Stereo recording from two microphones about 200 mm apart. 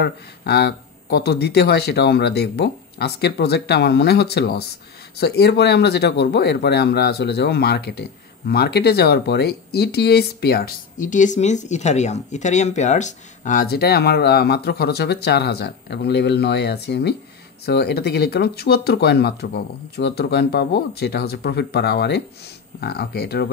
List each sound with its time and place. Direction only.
0.0 s speech: 55° left (ahead or behind)